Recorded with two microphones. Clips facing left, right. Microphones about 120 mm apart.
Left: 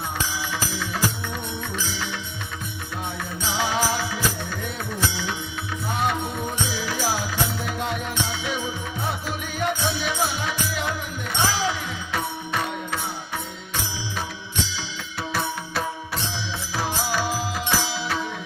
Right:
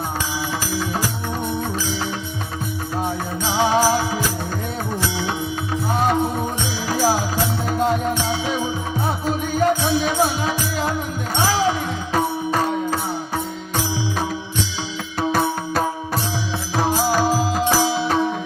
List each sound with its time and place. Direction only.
3.0 s music: 40° right (ahead or behind)
5.9 s music: 40° right (ahead or behind)
12.1 s music: 40° right (ahead or behind)